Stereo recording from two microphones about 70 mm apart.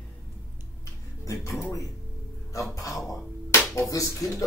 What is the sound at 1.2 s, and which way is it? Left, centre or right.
Speech, left.